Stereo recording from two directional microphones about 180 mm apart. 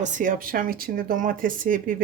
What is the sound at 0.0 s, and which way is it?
Speech, 45° right (ahead or behind).